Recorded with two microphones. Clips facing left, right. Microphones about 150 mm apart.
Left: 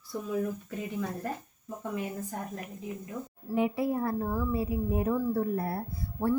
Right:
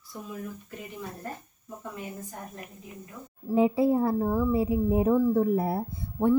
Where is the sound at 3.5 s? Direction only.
30° right (ahead or behind).